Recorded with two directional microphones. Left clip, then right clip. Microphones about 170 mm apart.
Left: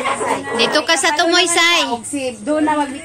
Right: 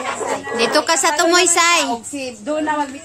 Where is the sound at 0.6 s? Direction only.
40° right (ahead or behind).